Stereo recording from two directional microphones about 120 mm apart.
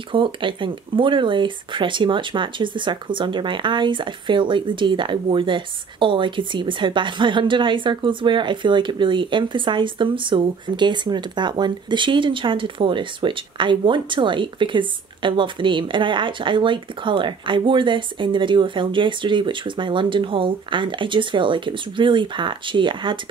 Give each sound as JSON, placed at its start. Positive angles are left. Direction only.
{"t": 0.1, "sound": "speech", "side_deg": -45}